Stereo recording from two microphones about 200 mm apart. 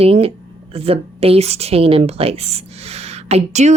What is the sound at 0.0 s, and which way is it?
A woman's voice, 30° right (ahead or behind).